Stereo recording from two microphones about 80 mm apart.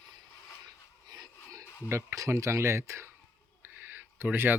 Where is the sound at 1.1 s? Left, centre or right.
Right.